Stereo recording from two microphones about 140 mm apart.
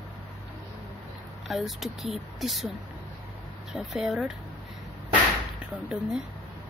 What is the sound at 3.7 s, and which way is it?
Speech, centre (ahead or behind).